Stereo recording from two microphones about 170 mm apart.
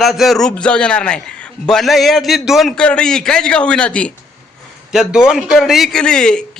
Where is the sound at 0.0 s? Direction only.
Centre (ahead or behind).